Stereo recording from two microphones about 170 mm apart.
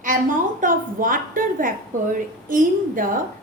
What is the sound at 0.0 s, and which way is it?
A woman's voice, 50° right (ahead or behind).